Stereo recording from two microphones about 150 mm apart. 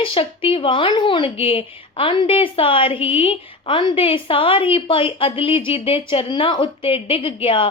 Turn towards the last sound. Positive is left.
turn(degrees=35)  # may be behind; listen again after turning